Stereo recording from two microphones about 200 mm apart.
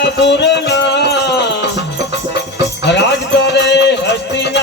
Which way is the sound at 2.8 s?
60° left (ahead or behind).